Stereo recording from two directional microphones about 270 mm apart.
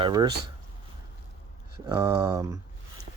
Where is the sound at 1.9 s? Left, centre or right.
Centre.